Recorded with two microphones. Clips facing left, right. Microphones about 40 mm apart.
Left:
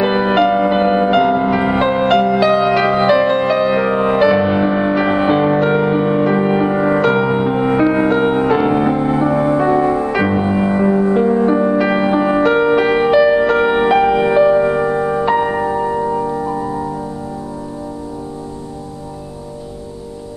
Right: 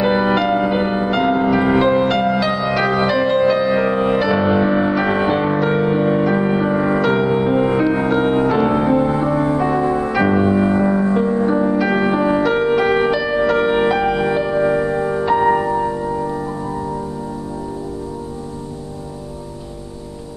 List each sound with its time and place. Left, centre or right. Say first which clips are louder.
0.0 s music: left 2 dB; centre
2.4 s music: left 5 dB; left
3.8 s music: left 3 dB; centre
12.4 s music: left 3 dB; left; by 15.9 s centre
15.9 s music: left 4 dB; left
16.3 s music: left 4 dB; centre